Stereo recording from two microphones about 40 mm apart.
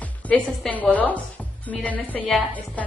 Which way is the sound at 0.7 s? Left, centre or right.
Left.